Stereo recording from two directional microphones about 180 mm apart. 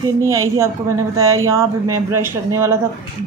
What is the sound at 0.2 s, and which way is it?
A woman's voice, 15° right (ahead or behind).